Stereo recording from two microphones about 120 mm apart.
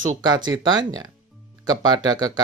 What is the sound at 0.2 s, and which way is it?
Speech, 35° right (ahead or behind).